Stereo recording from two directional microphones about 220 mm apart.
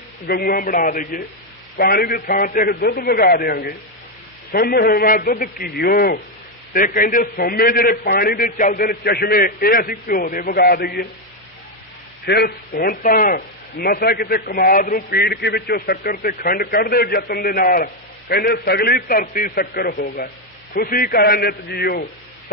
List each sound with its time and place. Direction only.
0.3 s a man's voice: 40° left (ahead or behind)
12.3 s a man's voice: 45° left (ahead or behind)